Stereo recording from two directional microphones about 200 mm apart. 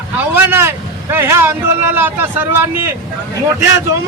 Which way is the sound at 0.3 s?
10° right (ahead or behind).